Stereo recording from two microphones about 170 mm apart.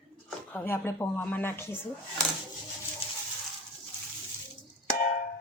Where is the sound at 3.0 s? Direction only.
35° left (ahead or behind).